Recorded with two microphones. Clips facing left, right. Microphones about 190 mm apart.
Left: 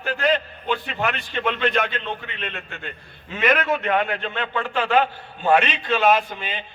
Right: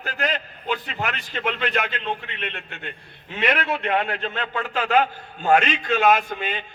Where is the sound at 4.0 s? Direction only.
35° right (ahead or behind).